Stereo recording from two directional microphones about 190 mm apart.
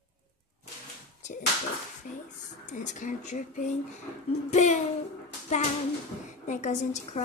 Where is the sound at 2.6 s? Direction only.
40° left (ahead or behind).